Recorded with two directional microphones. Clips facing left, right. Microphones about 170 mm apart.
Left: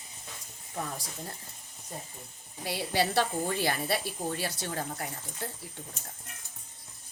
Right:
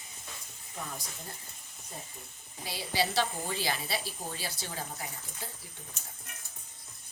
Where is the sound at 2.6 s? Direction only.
60° left (ahead or behind).